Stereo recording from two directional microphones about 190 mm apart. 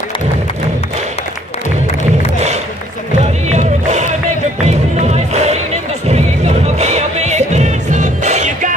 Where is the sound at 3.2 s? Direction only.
35° right (ahead or behind).